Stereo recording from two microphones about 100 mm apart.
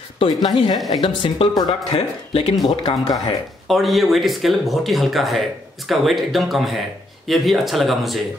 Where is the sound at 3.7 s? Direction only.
Centre (ahead or behind).